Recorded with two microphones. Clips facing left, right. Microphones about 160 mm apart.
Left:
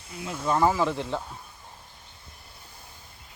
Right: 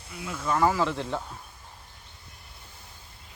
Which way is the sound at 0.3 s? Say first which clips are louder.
Left 1 dB; 25° left (ahead or behind).